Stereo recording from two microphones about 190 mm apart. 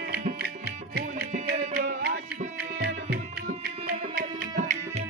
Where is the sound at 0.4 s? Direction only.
55° right (ahead or behind).